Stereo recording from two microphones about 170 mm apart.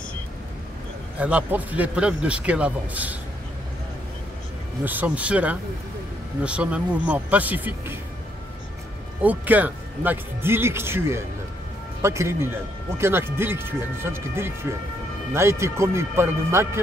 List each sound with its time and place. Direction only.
1.2 s speech: 10° right (ahead or behind)
4.8 s speech: 10° right (ahead or behind)
9.2 s speech: 10° right (ahead or behind)